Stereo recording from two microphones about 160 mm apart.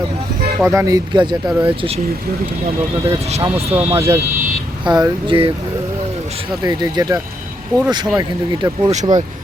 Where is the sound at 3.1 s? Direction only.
45° right (ahead or behind).